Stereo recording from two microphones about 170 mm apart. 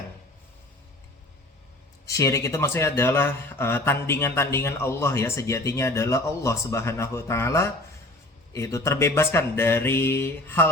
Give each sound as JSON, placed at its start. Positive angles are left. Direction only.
{"t": 2.0, "sound": "speech", "side_deg": 20}